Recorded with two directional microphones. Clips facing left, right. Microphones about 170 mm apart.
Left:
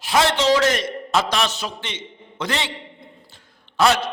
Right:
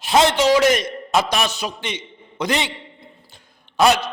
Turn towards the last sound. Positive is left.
turn(degrees=-15)  # may be behind; listen again after turning